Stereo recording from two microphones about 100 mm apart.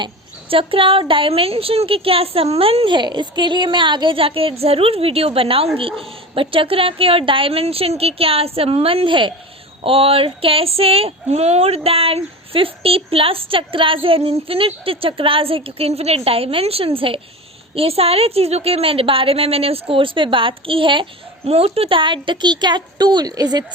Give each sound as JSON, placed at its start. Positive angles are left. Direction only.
{"t": 0.0, "sound": "speech", "side_deg": -65}
{"t": 9.8, "sound": "speech", "side_deg": -65}
{"t": 17.7, "sound": "a woman's voice", "side_deg": -80}